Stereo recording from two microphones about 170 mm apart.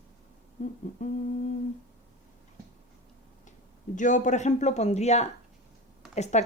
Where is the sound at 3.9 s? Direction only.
45° left (ahead or behind).